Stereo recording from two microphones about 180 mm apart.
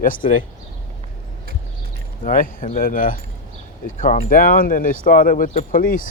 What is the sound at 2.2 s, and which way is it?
Speech, 50° left (ahead or behind).